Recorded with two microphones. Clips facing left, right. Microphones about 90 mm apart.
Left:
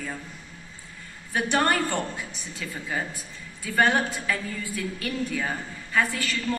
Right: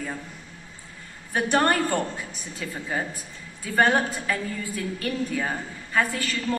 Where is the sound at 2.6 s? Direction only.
30° right (ahead or behind).